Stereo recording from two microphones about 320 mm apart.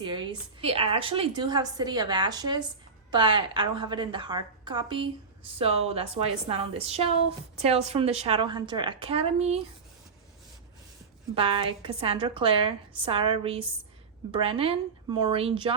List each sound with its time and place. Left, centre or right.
0.0 s a woman's voice: centre
11.3 s a woman's voice: centre